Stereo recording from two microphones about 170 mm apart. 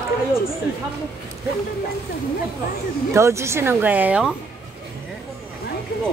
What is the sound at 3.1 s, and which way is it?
A woman's voice, 15° right (ahead or behind).